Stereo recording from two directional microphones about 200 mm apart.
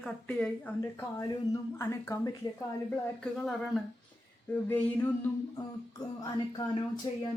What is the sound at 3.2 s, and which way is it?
A woman's voice, centre (ahead or behind).